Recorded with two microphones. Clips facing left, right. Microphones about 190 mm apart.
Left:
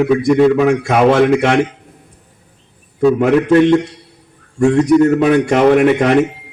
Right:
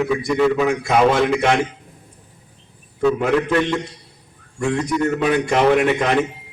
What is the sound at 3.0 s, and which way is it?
A man's voice, 45° left (ahead or behind).